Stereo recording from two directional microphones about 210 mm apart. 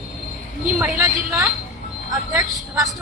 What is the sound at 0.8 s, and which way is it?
A woman's voice, 10° right (ahead or behind).